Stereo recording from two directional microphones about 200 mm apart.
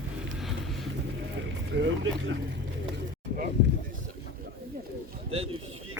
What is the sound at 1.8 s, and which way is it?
Speech, 70° right (ahead or behind).